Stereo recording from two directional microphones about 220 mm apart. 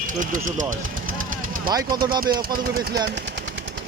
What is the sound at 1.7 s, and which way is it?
Speech, 20° right (ahead or behind).